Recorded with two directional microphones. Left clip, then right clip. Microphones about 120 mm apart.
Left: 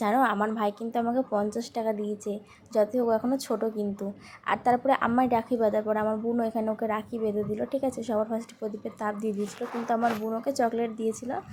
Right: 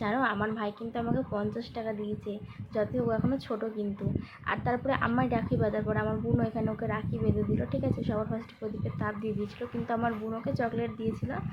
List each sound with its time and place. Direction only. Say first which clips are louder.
0.0 s a woman's voice: left 5 dB; 35° left (ahead or behind)